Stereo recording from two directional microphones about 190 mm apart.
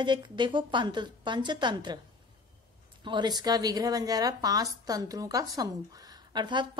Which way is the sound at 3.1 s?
25° right (ahead or behind).